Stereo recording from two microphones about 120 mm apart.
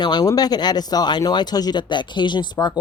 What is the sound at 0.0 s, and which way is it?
Speech, 35° left (ahead or behind).